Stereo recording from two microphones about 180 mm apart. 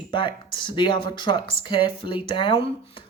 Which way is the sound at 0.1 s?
25° left (ahead or behind).